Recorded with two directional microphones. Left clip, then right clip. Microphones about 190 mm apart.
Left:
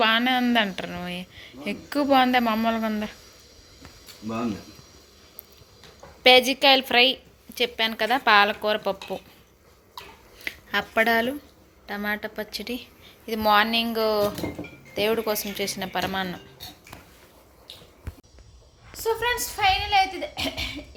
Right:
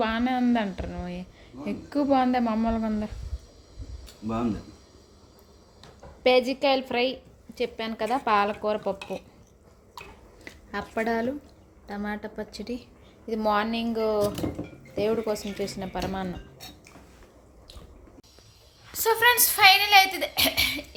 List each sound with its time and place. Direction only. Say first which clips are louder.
0.0 s speech: left 5 dB; 5° right (ahead or behind)
6.2 s speech: left 5 dB; centre (ahead or behind)
10.4 s speech: left 8 dB; 5° left (ahead or behind)
19.2 s a sound: right 6 dB; 20° right (ahead or behind); by 20.7 s 35° right (ahead or behind)